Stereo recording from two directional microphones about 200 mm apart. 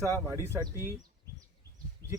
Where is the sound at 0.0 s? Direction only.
15° right (ahead or behind).